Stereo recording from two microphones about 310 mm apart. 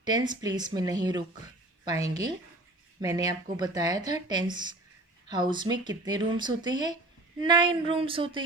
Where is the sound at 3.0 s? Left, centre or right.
Centre.